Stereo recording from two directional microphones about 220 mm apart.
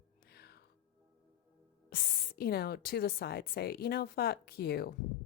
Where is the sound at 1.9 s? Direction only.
45° left (ahead or behind).